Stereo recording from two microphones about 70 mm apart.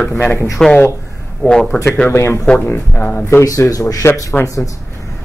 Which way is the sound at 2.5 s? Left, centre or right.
Left.